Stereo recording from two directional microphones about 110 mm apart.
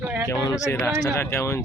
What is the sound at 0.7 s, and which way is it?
Speech, 20° left (ahead or behind).